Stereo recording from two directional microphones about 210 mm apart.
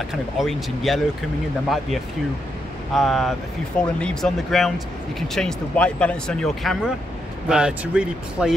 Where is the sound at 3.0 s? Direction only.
Centre (ahead or behind).